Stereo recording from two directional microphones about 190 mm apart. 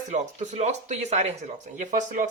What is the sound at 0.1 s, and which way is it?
Speech, 40° right (ahead or behind).